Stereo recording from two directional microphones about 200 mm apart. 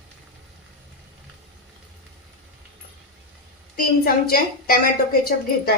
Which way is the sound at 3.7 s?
50° left (ahead or behind).